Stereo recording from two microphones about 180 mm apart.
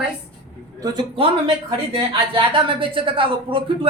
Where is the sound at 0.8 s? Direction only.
25° right (ahead or behind).